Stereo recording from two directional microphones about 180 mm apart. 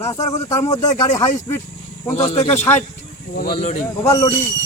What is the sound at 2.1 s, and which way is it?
Speech, 35° left (ahead or behind).